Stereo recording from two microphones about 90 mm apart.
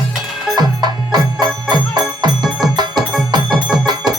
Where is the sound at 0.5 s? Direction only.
50° right (ahead or behind).